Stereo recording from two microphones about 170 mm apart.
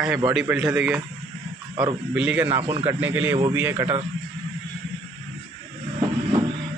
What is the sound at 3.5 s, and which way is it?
Speech, 10° right (ahead or behind).